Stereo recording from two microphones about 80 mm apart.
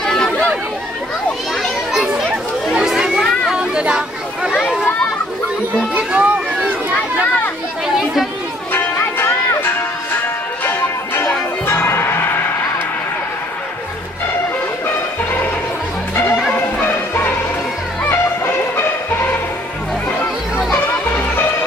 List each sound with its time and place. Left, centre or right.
0.0 s chatter: centre
2.0 s children playing: centre
3.5 s chatter: centre
5.9 s a sound: centre
8.7 s music: left
16.5 s music: left